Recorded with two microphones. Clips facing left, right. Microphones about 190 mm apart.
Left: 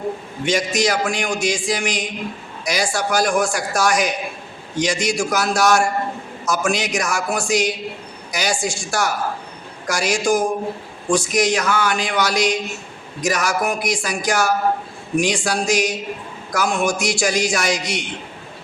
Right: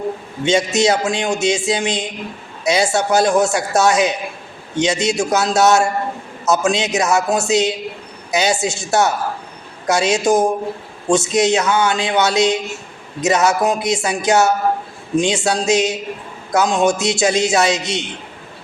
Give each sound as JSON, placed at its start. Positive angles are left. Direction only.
{"t": 0.4, "sound": "a man's voice", "side_deg": -25}